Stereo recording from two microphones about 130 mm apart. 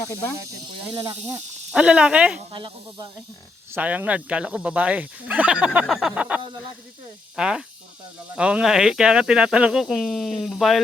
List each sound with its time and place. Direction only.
0.0 s speech: 25° left (ahead or behind)
1.7 s speech: 10° right (ahead or behind)
2.5 s speech: 35° right (ahead or behind)
3.7 s speech: 10° right (ahead or behind)